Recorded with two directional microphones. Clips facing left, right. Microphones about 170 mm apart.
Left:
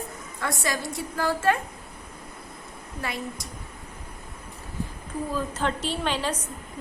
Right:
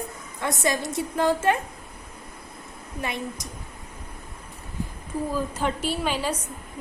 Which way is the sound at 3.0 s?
20° right (ahead or behind).